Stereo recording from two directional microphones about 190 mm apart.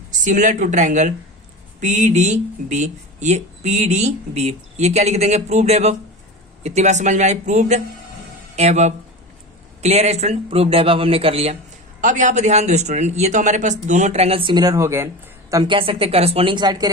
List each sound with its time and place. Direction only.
0.3 s a man's voice: 40° right (ahead or behind); by 16.9 s 20° right (ahead or behind)